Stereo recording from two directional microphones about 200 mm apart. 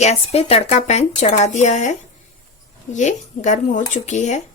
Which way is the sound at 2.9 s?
35° left (ahead or behind).